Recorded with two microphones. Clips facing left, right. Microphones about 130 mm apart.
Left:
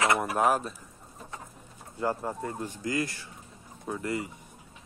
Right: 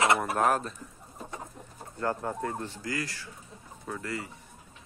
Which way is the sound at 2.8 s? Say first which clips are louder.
Left 4 dB; 20° left (ahead or behind).